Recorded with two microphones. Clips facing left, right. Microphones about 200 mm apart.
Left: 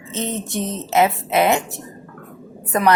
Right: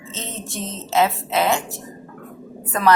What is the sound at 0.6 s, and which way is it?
A woman's voice, 15° left (ahead or behind).